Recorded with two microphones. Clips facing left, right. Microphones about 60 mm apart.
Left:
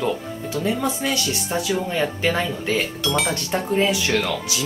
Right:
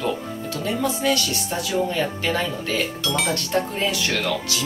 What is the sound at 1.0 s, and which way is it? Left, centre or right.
Speech, centre.